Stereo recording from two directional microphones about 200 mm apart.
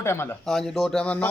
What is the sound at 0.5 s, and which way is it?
Speech, centre (ahead or behind).